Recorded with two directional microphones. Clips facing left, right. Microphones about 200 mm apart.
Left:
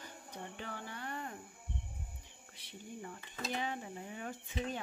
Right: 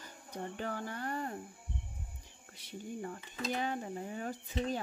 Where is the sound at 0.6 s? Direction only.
45° right (ahead or behind).